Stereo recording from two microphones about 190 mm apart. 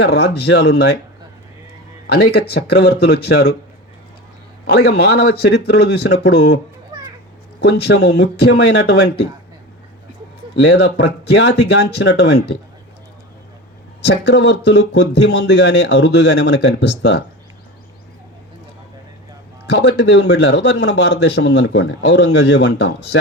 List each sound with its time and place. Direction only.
0.0 s speech: 60° left (ahead or behind)
2.3 s speech: 60° left (ahead or behind)
4.6 s speech: 60° left (ahead or behind)
7.6 s speech: 60° left (ahead or behind)
10.5 s speech: 60° left (ahead or behind)
14.3 s speech: 65° left (ahead or behind)
19.7 s speech: 65° left (ahead or behind)